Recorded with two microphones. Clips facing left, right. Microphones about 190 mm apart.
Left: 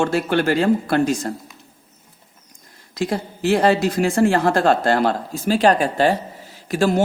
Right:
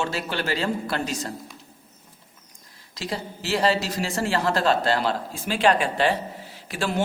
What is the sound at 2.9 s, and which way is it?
Speech, 50° left (ahead or behind).